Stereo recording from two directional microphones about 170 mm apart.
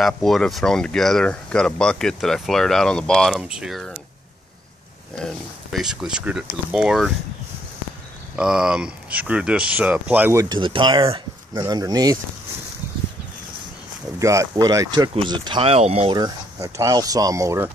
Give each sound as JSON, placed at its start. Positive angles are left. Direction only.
{"t": 0.0, "sound": "speech", "side_deg": 0}
{"t": 5.2, "sound": "speech", "side_deg": 0}
{"t": 8.4, "sound": "speech", "side_deg": -5}
{"t": 10.5, "sound": "speech", "side_deg": -30}
{"t": 14.2, "sound": "speech", "side_deg": -20}
{"t": 16.2, "sound": "speech", "side_deg": -20}